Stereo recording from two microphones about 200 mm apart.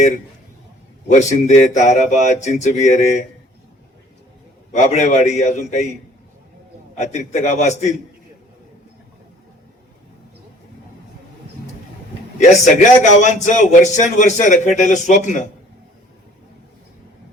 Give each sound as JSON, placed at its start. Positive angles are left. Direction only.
{"t": 1.0, "sound": "a man's voice", "side_deg": 35}
{"t": 4.7, "sound": "a man's voice", "side_deg": 35}
{"t": 6.9, "sound": "a man's voice", "side_deg": 35}
{"t": 12.8, "sound": "a man's voice", "side_deg": 35}